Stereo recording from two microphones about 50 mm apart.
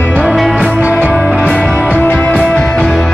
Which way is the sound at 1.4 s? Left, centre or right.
Left.